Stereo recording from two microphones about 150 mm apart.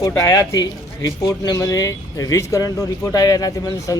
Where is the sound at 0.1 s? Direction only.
20° left (ahead or behind).